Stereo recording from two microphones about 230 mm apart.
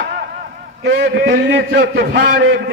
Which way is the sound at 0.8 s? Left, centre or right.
Right.